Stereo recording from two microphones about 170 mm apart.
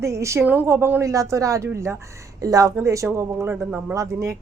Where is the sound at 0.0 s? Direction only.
15° right (ahead or behind).